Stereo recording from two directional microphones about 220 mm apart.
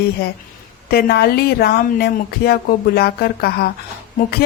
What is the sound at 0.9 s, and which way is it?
Speech, 45° left (ahead or behind).